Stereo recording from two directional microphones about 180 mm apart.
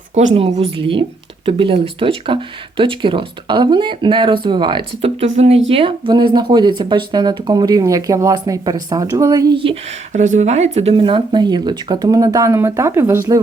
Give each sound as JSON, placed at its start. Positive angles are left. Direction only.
{"t": 0.3, "sound": "speech", "side_deg": -35}
{"t": 5.2, "sound": "speech", "side_deg": -35}
{"t": 10.1, "sound": "speech", "side_deg": -40}